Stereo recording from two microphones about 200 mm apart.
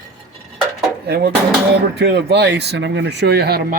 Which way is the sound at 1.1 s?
50° right (ahead or behind).